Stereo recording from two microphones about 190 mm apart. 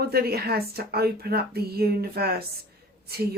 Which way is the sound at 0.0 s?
55° right (ahead or behind).